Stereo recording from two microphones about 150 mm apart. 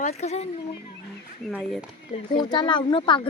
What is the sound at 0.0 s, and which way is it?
Speech, 45° left (ahead or behind).